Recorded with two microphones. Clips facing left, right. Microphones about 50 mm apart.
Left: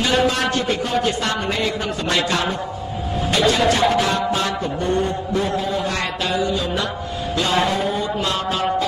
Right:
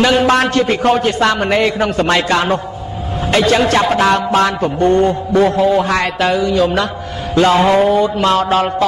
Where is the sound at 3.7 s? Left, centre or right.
Right.